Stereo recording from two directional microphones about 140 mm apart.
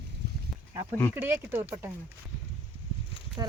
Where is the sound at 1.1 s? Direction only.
15° right (ahead or behind).